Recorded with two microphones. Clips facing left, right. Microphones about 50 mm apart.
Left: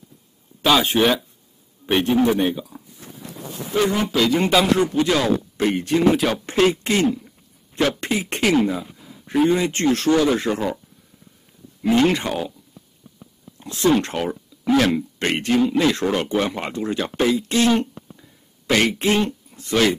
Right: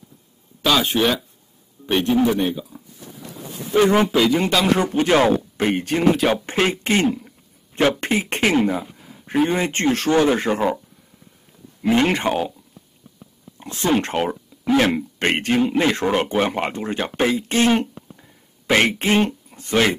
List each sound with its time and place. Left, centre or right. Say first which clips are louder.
0.7 s a man's voice: left 1 dB; centre
4.1 s a man's voice: right 2 dB; centre
4.4 s speech: left 2 dB; centre
4.8 s speech: right 3 dB; right
7.2 s a sound: right 1 dB; right
8.0 s beatboxing: right 2 dB; right
8.6 s a sound: right 2 dB; right
9.5 s speech: left 1 dB; right
12.1 s speech: right 2 dB; right
13.6 s speech: left 2 dB; right